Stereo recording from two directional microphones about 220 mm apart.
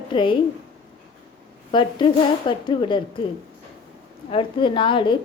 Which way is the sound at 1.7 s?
20° left (ahead or behind).